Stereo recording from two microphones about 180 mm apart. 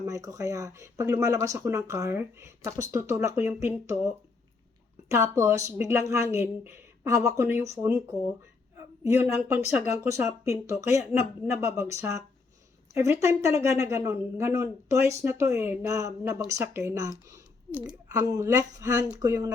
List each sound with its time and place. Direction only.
0.0 s speech: 15° right (ahead or behind)
9.7 s speech: 15° right (ahead or behind)